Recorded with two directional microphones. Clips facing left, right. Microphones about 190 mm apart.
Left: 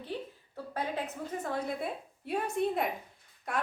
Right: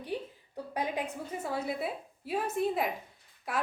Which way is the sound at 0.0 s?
15° right (ahead or behind).